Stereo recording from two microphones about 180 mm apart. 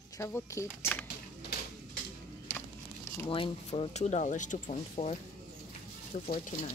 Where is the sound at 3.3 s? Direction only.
30° left (ahead or behind).